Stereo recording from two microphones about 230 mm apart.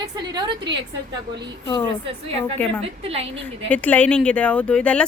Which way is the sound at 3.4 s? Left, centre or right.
Centre.